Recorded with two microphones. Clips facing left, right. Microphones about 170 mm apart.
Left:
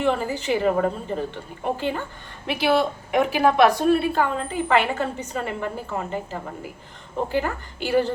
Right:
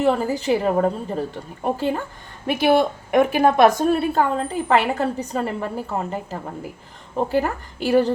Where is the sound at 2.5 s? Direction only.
50° right (ahead or behind).